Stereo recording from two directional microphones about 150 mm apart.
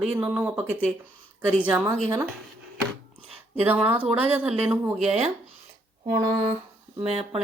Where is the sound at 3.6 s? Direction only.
10° right (ahead or behind).